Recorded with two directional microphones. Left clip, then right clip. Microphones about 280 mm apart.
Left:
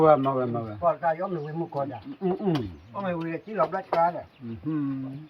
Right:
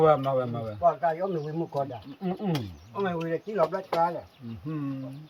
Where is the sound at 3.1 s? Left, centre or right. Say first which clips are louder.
Left 3 dB; right.